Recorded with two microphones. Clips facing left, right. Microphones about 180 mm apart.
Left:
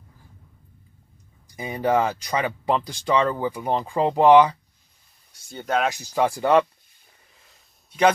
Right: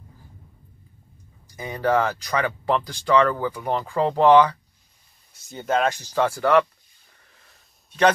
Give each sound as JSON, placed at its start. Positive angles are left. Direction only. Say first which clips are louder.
{"t": 1.6, "sound": "speech", "louder": "even", "side_deg": 15}
{"t": 5.5, "sound": "speech", "louder": "right 1 dB", "side_deg": 0}
{"t": 6.1, "sound": "speech", "louder": "left 1 dB", "side_deg": 15}